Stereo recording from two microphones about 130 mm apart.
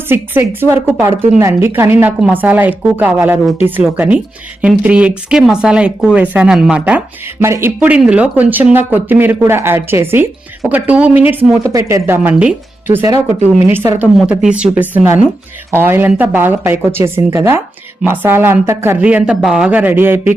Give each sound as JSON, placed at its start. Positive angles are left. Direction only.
{"t": 0.1, "sound": "speech", "side_deg": -15}
{"t": 7.4, "sound": "speech", "side_deg": -20}
{"t": 7.8, "sound": "speech", "side_deg": -10}